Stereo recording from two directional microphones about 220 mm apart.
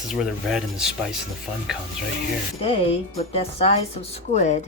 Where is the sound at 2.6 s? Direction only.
25° left (ahead or behind).